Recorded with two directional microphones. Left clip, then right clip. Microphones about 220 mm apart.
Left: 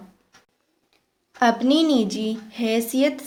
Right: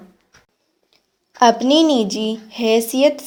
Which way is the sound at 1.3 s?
25° right (ahead or behind).